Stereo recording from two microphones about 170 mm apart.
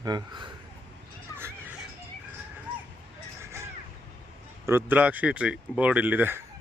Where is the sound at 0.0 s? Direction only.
25° right (ahead or behind).